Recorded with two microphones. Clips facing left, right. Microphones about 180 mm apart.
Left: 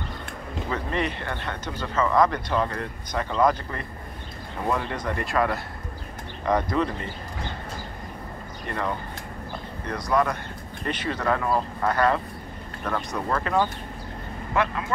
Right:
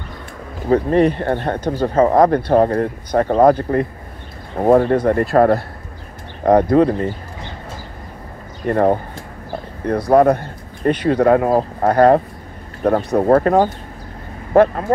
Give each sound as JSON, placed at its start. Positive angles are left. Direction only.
{"t": 0.7, "sound": "speech", "side_deg": -50}
{"t": 8.6, "sound": "speech", "side_deg": -50}
{"t": 13.1, "sound": "speech", "side_deg": -55}